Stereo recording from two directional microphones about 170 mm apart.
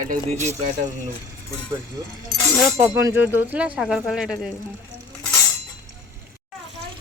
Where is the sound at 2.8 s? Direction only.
10° right (ahead or behind).